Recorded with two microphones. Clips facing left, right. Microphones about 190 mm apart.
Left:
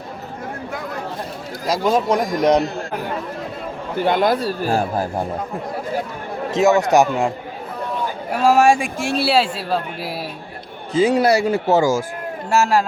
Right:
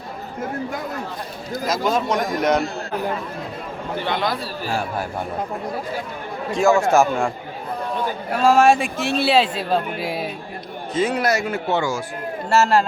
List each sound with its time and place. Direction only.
1.6 s a man's voice: 35° left (ahead or behind)
4.0 s speech: 50° left (ahead or behind)
4.7 s a man's voice: 35° left (ahead or behind)
6.5 s a man's voice: 20° left (ahead or behind)
8.3 s a man's voice: 15° left (ahead or behind)
10.9 s a man's voice: 30° left (ahead or behind)
12.5 s a man's voice: 10° left (ahead or behind)